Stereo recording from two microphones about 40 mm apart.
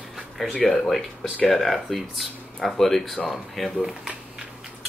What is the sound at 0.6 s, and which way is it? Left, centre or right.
Speech, centre.